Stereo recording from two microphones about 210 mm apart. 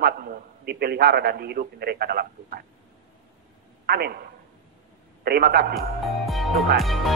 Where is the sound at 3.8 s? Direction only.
50° right (ahead or behind).